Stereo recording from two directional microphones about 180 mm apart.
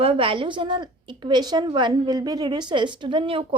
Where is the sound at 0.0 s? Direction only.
30° right (ahead or behind).